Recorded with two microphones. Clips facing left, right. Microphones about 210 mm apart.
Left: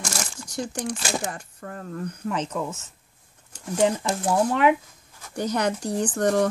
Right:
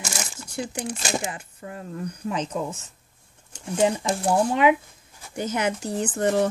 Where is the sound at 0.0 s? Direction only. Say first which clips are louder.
Left 1 dB; 5° right (ahead or behind).